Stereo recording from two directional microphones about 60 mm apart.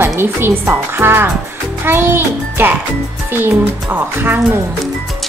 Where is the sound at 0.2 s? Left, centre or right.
Right.